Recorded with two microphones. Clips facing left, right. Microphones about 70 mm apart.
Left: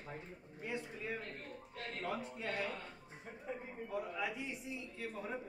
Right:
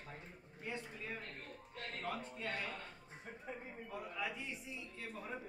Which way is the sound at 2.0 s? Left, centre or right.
Centre.